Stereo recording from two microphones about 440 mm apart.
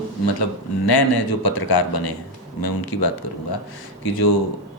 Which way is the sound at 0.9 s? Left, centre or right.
Left.